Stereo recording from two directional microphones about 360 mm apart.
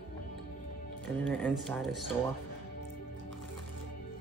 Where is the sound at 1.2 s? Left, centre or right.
Centre.